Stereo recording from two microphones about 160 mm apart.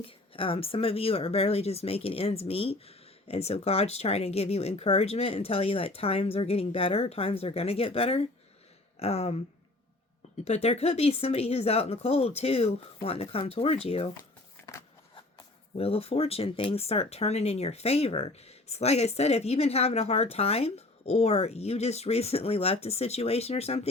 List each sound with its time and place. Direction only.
0.0 s speech: 35° left (ahead or behind)
10.4 s speech: 40° left (ahead or behind)
15.1 s speech: 35° left (ahead or behind)